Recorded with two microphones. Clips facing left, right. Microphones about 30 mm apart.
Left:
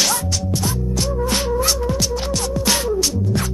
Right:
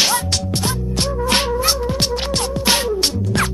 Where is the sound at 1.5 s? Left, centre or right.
Right.